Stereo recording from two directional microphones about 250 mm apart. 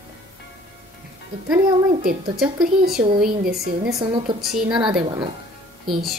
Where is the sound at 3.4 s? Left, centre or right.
Right.